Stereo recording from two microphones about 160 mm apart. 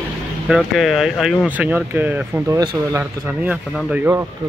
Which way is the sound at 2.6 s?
25° right (ahead or behind).